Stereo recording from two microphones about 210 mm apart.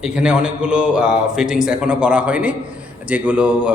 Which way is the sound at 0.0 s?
5° right (ahead or behind).